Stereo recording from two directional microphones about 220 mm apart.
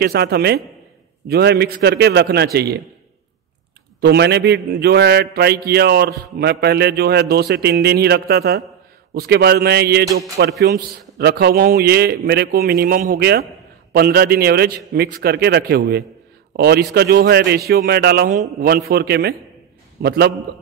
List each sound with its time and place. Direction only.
0.0 s a man's voice: 45° right (ahead or behind)
4.0 s a man's voice: 50° right (ahead or behind)